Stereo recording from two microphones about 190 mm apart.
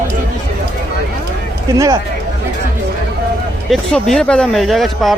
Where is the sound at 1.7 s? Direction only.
15° right (ahead or behind).